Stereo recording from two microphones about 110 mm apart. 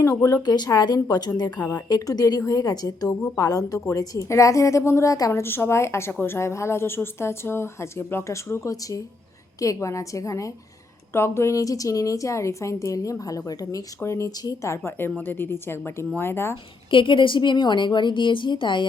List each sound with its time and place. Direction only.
0.0 s a woman's voice: 30° left (ahead or behind)
5.3 s a woman's voice: 20° left (ahead or behind)
14.8 s a woman's voice: 20° left (ahead or behind)
16.9 s a woman's voice: 50° left (ahead or behind)